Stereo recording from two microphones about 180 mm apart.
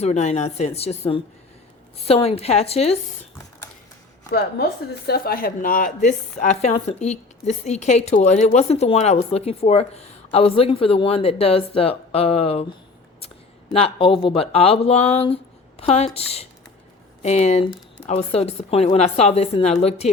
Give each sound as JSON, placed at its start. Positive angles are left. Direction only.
{"t": 0.0, "sound": "a woman's voice", "side_deg": 40}
{"t": 4.3, "sound": "a woman's voice", "side_deg": 60}
{"t": 13.1, "sound": "a sound", "side_deg": 30}
{"t": 14.5, "sound": "a woman's voice", "side_deg": 35}